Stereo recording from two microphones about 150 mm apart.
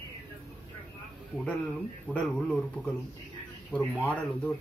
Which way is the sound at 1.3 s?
10° left (ahead or behind).